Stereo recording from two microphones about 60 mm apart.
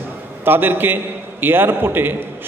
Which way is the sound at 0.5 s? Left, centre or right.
Right.